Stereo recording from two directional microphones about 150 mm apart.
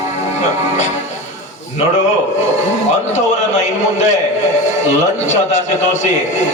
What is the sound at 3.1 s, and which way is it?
A man's voice, 50° left (ahead or behind).